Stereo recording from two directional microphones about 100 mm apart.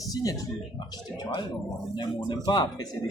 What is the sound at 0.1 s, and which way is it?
Speech, 35° left (ahead or behind).